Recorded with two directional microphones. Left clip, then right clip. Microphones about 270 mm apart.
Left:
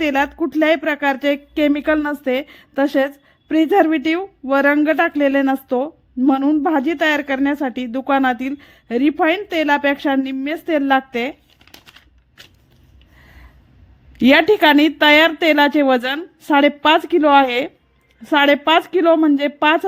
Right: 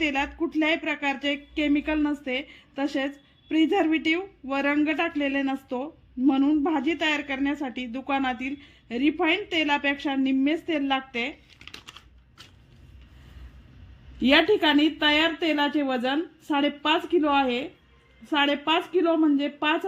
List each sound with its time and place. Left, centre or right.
0.0 s speech: left
14.2 s speech: left